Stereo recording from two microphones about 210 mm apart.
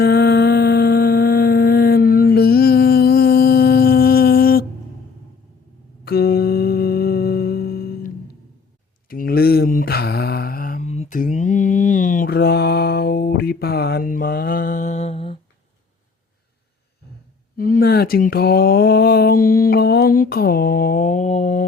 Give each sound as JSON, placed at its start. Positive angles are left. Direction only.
{"t": 0.0, "sound": "humming", "side_deg": 50}
{"t": 6.1, "sound": "music", "side_deg": 45}
{"t": 9.0, "sound": "mantra", "side_deg": 45}
{"t": 17.6, "sound": "a sound", "side_deg": 45}